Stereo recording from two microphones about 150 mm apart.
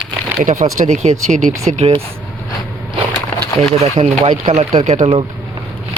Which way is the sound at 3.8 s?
50° right (ahead or behind).